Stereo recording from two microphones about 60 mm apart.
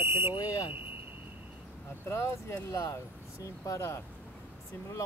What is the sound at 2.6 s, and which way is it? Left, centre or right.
Speech, left.